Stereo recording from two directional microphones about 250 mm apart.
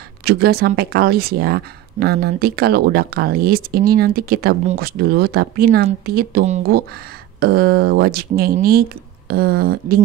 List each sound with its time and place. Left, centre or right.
0.2 s speech: right